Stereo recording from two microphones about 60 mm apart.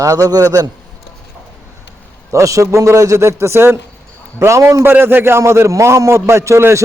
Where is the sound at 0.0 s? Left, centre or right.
Right.